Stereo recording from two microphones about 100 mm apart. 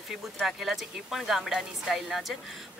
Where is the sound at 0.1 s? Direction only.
5° right (ahead or behind).